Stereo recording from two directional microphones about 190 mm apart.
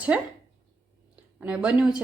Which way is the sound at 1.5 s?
5° right (ahead or behind).